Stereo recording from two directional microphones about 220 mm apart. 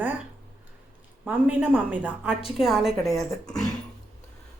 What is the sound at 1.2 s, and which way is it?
A woman's voice, 5° right (ahead or behind).